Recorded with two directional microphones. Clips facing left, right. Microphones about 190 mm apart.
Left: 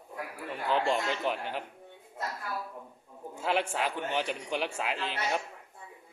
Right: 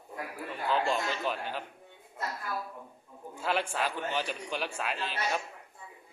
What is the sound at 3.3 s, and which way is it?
A man's voice, 20° left (ahead or behind).